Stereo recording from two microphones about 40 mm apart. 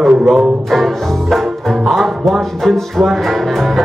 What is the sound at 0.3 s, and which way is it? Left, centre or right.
Music, centre.